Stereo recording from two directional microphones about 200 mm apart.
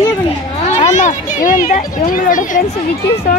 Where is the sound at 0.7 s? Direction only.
35° left (ahead or behind).